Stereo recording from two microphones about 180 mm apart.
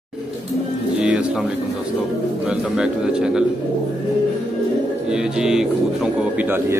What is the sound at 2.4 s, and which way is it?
Speech, 5° right (ahead or behind).